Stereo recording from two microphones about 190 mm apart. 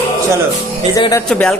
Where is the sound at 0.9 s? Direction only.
20° left (ahead or behind).